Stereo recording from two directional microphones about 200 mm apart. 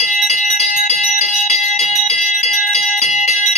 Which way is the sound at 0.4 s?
40° left (ahead or behind).